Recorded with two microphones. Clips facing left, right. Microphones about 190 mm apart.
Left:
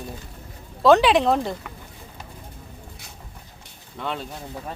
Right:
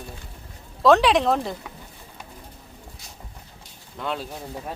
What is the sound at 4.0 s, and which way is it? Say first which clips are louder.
Speech: even; centre (ahead or behind).